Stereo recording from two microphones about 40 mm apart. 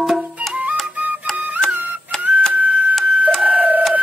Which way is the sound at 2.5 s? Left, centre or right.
Right.